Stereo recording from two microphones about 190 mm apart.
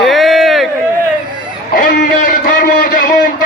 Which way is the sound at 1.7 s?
45° left (ahead or behind).